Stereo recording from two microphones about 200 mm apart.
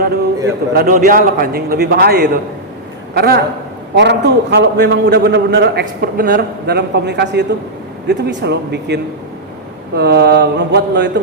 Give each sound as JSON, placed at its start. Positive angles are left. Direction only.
{"t": 0.7, "sound": "a man's voice", "side_deg": -45}